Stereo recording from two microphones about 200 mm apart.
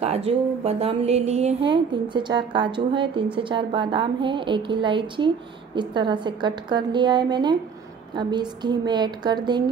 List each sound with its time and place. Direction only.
0.0 s speech: 30° right (ahead or behind)